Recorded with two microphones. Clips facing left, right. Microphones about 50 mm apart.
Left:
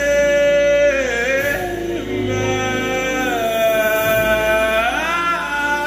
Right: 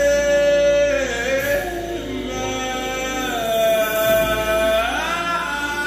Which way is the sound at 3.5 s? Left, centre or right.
Left.